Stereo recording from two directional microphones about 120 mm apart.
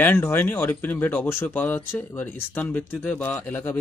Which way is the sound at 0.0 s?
20° left (ahead or behind).